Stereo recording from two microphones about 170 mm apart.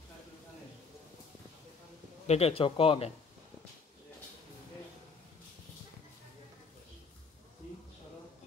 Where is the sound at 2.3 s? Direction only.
35° left (ahead or behind).